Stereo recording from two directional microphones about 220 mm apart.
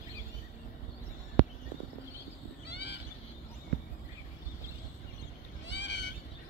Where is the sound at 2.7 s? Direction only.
50° left (ahead or behind).